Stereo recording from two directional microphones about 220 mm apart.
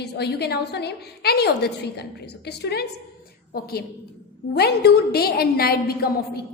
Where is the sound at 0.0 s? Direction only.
50° left (ahead or behind).